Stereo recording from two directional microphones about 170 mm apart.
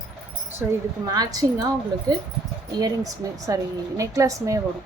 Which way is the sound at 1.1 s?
20° right (ahead or behind).